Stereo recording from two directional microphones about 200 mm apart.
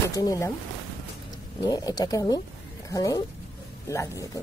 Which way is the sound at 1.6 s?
20° left (ahead or behind).